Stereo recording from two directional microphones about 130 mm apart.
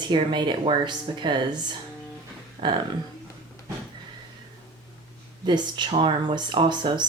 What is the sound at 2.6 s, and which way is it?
Speech, 45° right (ahead or behind).